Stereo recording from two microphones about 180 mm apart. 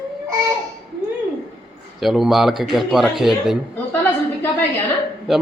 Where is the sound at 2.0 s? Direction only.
Centre (ahead or behind).